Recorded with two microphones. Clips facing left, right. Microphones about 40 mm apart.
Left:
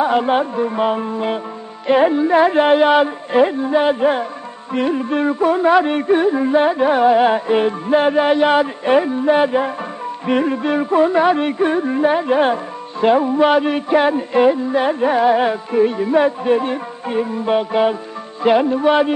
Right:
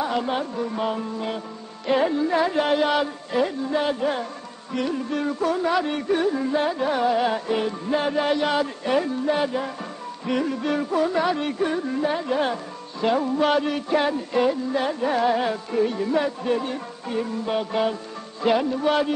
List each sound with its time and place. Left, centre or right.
0.0 s music: left